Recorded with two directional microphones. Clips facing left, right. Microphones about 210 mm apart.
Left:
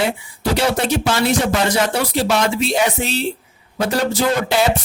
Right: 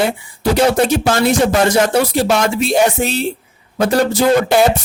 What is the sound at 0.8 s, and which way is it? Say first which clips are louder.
Speech: right 3 dB; 50° right (ahead or behind).